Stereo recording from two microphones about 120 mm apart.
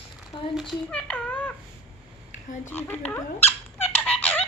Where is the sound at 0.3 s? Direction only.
40° left (ahead or behind).